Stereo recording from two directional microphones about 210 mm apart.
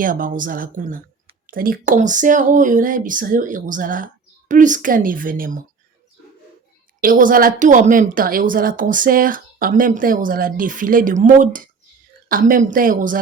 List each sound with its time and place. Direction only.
0.0 s a woman's voice: 40° right (ahead or behind)
7.0 s a woman's voice: 40° right (ahead or behind)